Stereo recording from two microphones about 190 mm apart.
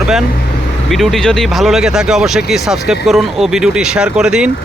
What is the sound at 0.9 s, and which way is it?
Speech, centre (ahead or behind).